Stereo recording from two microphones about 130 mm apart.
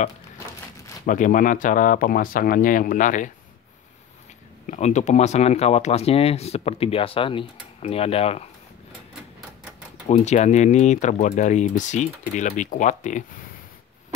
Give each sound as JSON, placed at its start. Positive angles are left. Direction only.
{"t": 1.0, "sound": "speech", "side_deg": 85}
{"t": 4.6, "sound": "speech", "side_deg": 65}
{"t": 10.0, "sound": "speech", "side_deg": 60}